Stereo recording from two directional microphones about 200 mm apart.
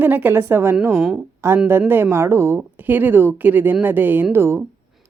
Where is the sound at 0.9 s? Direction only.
Centre (ahead or behind).